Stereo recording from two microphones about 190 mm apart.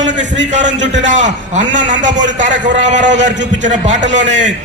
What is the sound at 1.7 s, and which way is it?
A man's voice, 40° right (ahead or behind).